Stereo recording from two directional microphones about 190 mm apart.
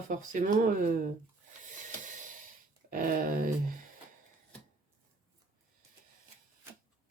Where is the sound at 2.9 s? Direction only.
45° right (ahead or behind).